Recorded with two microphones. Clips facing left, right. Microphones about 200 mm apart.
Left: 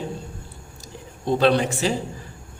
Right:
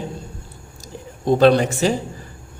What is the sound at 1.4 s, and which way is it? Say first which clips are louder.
Speech: right 5 dB; 45° right (ahead or behind).